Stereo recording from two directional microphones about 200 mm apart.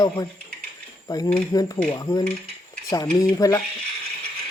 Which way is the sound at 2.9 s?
20° left (ahead or behind).